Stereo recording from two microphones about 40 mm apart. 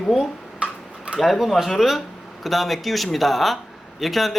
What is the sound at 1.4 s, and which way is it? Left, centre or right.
Speech, centre.